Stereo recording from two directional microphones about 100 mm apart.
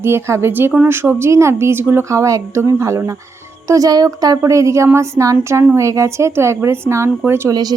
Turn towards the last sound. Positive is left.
turn(degrees=-40)  # may be behind; listen again after turning